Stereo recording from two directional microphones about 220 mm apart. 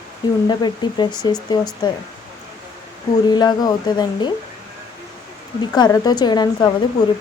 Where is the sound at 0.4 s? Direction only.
20° left (ahead or behind).